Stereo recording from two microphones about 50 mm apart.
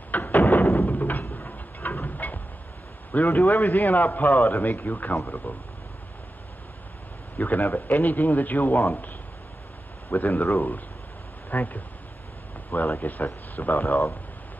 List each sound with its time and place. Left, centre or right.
0.1 s a sound: left
1.3 s train: left
3.1 s a man's voice: left
7.3 s a man's voice: left
10.1 s a man's voice: left